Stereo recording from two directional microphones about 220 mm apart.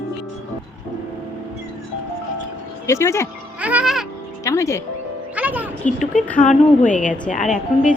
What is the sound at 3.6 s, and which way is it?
Music, 5° right (ahead or behind).